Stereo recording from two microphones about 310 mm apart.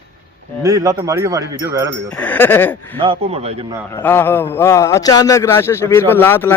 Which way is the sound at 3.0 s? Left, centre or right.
Centre.